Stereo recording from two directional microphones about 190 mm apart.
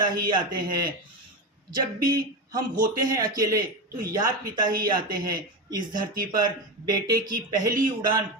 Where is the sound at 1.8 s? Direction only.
20° right (ahead or behind).